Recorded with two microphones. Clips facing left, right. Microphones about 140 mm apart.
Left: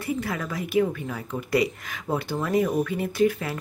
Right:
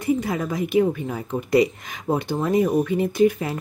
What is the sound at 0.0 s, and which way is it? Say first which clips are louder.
Speech: right 6 dB; 20° right (ahead or behind).